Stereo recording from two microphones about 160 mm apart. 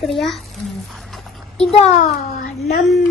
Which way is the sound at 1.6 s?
40° left (ahead or behind).